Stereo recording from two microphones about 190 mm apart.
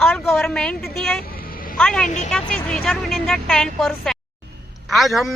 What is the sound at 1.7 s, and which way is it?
Speech, 5° left (ahead or behind).